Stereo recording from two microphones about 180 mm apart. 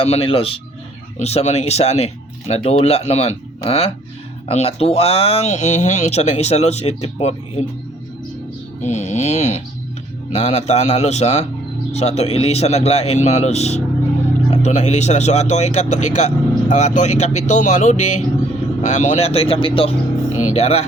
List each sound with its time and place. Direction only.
0.0 s speech: 30° left (ahead or behind)
8.8 s speech: 40° left (ahead or behind)
20.3 s music: 40° left (ahead or behind)